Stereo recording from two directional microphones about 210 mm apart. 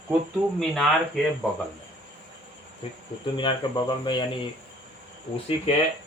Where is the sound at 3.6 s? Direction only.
20° left (ahead or behind).